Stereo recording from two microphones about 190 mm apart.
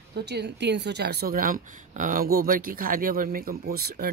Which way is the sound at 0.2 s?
60° right (ahead or behind).